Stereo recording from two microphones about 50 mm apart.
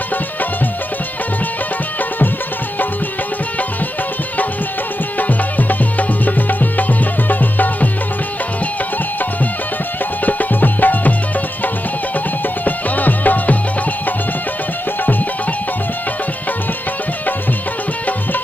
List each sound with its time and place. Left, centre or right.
5.2 s music: left
10.2 s music: left
12.6 s music: left